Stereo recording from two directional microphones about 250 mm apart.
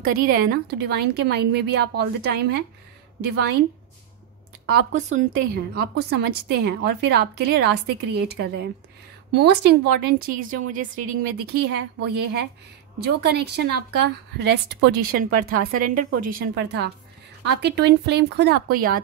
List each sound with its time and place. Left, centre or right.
0.0 s a woman's voice: right
4.6 s a woman's voice: right